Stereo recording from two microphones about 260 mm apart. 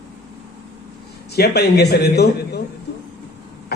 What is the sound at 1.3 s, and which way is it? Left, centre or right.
A man's voice, left.